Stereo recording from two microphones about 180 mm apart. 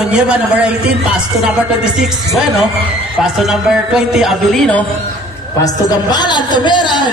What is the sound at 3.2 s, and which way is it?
Speech, centre (ahead or behind).